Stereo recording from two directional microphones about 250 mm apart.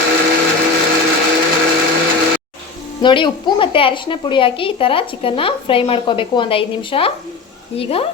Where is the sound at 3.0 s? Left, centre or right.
Centre.